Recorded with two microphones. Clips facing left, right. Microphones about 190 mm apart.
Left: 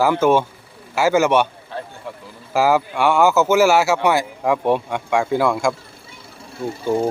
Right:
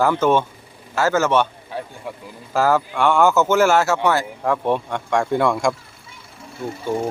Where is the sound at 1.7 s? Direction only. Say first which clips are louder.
Right 1 dB; 15° right (ahead or behind).